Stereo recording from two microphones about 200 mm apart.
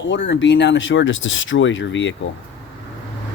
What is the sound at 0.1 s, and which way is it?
Speech, 65° left (ahead or behind).